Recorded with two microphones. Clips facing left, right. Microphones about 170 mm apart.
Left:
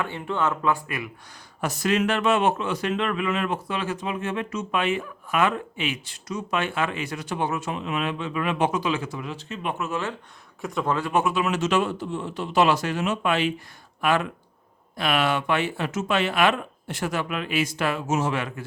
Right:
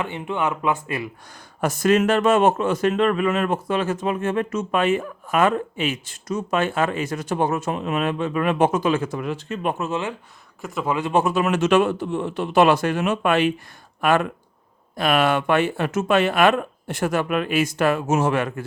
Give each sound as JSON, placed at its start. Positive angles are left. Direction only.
{"t": 0.0, "sound": "speech", "side_deg": -15}
{"t": 1.3, "sound": "speech", "side_deg": -50}
{"t": 9.7, "sound": "speech", "side_deg": -30}
{"t": 10.6, "sound": "a man's voice", "side_deg": 0}
{"t": 11.1, "sound": "speech", "side_deg": -35}